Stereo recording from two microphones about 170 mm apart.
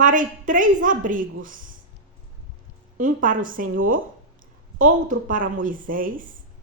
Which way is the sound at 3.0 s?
50° right (ahead or behind).